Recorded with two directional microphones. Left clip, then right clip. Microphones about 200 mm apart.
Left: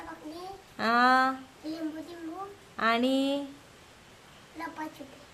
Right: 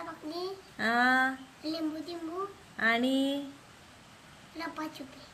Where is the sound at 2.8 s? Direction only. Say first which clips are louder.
Left 2 dB; 20° left (ahead or behind).